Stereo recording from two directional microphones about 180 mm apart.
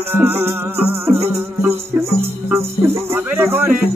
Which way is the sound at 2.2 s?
15° right (ahead or behind).